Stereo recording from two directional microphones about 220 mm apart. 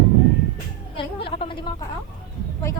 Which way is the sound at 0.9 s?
25° left (ahead or behind).